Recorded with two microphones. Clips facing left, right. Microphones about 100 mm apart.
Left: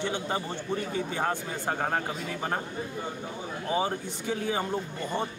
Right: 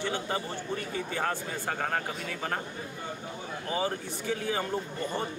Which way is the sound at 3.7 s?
20° left (ahead or behind).